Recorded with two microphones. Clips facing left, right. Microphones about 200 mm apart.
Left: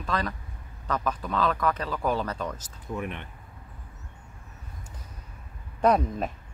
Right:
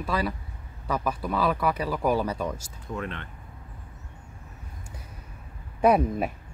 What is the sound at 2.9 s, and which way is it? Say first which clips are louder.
Speech: even; 15° left (ahead or behind).